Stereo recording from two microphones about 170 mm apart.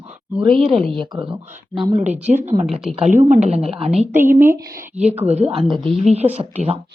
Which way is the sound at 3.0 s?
45° right (ahead or behind).